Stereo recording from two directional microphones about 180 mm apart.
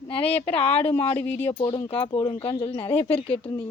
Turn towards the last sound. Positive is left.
turn(degrees=30)  # may be behind; listen again after turning